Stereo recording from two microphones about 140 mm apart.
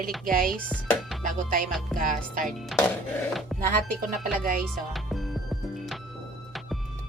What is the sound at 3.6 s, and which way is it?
Speech, 90° right.